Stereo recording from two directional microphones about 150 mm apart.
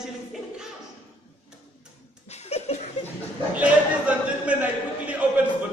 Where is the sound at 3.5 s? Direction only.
10° right (ahead or behind).